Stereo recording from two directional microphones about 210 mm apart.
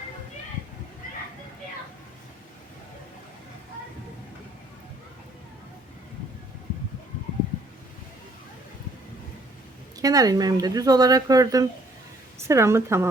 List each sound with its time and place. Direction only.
10.0 s speech: 15° right (ahead or behind)